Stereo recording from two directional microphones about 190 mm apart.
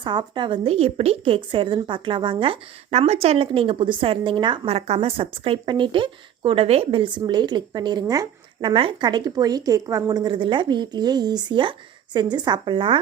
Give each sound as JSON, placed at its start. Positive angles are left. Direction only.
{"t": 0.0, "sound": "a woman's voice", "side_deg": -25}